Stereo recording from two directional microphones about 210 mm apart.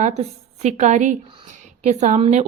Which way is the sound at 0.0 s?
30° right (ahead or behind).